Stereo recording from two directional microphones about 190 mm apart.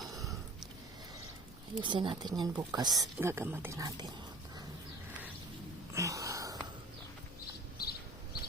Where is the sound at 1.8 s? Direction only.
25° right (ahead or behind).